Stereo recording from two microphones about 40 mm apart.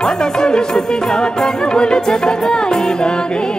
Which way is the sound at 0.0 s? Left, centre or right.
Centre.